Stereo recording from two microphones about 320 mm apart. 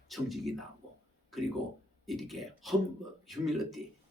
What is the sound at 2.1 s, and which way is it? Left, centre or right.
Speech, centre.